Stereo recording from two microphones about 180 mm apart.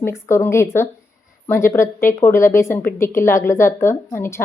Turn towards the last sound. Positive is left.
turn(degrees=15)  # may be behind; listen again after turning